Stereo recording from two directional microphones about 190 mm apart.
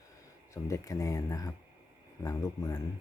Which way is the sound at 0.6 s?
15° left (ahead or behind).